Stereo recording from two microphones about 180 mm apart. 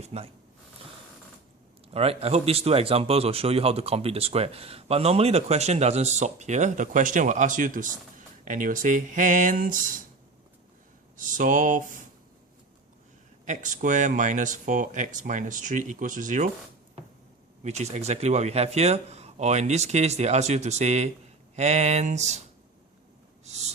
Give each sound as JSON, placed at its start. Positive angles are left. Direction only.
{"t": 0.0, "sound": "a man's voice", "side_deg": -35}
{"t": 1.9, "sound": "a man's voice", "side_deg": -35}
{"t": 11.2, "sound": "speech", "side_deg": -45}
{"t": 13.4, "sound": "speech", "side_deg": -45}
{"t": 17.6, "sound": "a man's voice", "side_deg": -40}
{"t": 23.5, "sound": "a man's voice", "side_deg": -40}